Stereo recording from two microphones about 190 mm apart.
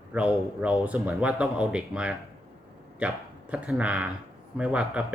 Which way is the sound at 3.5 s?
5° right (ahead or behind).